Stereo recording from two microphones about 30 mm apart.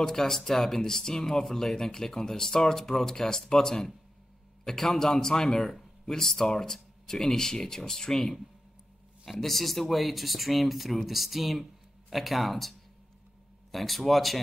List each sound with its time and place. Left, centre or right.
0.0 s a man's voice: centre
9.4 s speech: centre